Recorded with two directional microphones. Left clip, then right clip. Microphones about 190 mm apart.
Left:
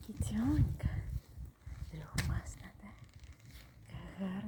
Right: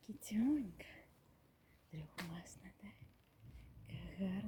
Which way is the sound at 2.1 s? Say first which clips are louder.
Left 8 dB; 60° left (ahead or behind).